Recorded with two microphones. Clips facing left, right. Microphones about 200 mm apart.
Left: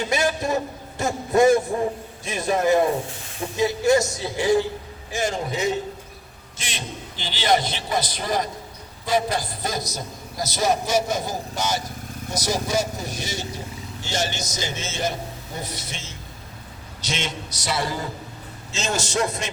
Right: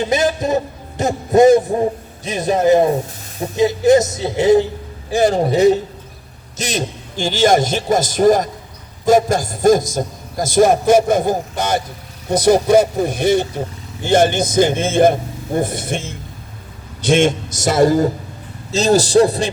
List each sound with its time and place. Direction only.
0.1 s a man's voice: 20° right (ahead or behind)
5.1 s a man's voice: 35° right (ahead or behind)